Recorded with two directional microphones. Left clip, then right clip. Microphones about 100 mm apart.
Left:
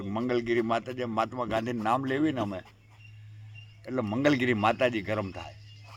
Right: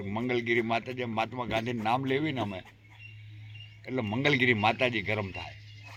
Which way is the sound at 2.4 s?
45° left (ahead or behind).